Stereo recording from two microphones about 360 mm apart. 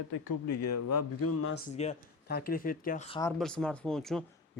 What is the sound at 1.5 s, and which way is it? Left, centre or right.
Speech, centre.